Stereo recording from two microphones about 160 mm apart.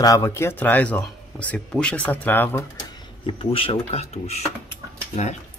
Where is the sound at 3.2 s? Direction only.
35° left (ahead or behind).